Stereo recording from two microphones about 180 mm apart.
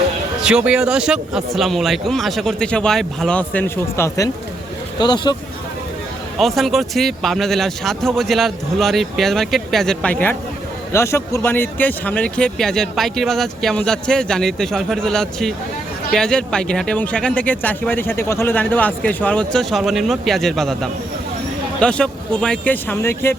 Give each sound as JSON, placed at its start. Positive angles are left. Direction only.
{"t": 0.4, "sound": "speech", "side_deg": -5}
{"t": 6.4, "sound": "speech", "side_deg": 0}
{"t": 21.8, "sound": "speech", "side_deg": 5}